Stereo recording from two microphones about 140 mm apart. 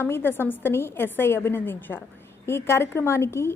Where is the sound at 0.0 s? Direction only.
15° left (ahead or behind).